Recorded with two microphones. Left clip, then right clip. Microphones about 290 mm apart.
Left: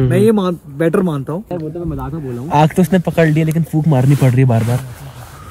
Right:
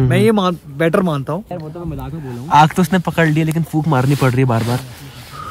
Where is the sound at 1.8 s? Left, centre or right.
Left.